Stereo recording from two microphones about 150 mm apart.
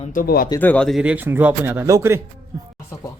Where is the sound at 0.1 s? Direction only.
75° left (ahead or behind).